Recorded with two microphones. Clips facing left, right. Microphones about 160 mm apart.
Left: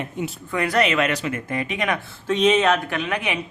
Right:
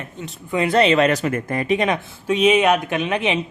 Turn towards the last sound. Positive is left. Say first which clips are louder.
# right 4 dB
turn(degrees=-20)  # may be behind; listen again after turning